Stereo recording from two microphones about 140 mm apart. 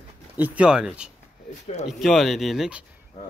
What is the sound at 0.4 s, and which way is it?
Speech, 10° right (ahead or behind).